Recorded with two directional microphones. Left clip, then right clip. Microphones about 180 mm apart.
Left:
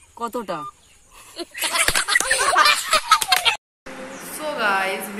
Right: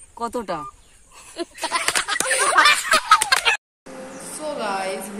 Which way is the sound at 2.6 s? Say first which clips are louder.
Right 2 dB; 40° right (ahead or behind).